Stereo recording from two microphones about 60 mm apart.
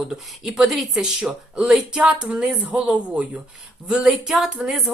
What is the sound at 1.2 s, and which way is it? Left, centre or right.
Speech, centre.